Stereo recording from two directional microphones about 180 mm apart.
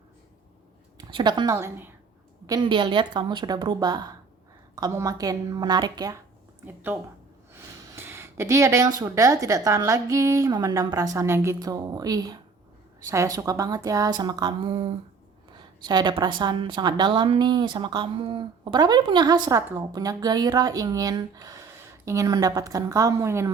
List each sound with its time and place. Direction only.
0.9 s a woman's voice: 25° right (ahead or behind)
1.5 s speech: 10° right (ahead or behind)
2.5 s a woman's voice: 25° right (ahead or behind)
6.7 s a woman's voice: 10° right (ahead or behind)